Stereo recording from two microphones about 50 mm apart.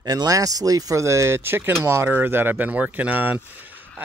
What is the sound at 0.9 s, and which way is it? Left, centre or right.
Speech, right.